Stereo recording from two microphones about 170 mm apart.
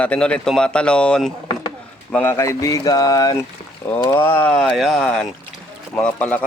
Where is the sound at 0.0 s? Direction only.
10° left (ahead or behind).